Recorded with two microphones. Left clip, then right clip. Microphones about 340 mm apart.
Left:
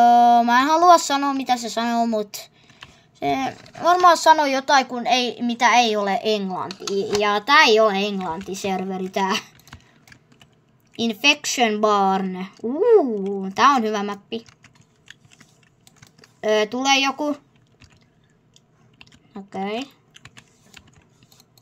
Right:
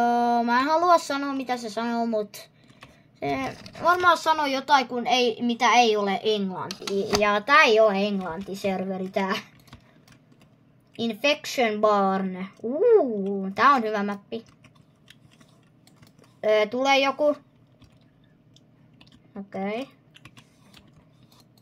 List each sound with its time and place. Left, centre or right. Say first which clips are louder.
0.0 s speech: left 9 dB; left
11.1 s speech: left 6 dB; left
16.3 s speech: left 1 dB; left